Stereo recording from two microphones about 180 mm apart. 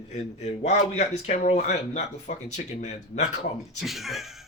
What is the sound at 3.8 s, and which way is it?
Speech, centre (ahead or behind).